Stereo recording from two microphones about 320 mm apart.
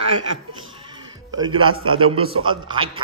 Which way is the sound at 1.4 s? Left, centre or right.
Centre.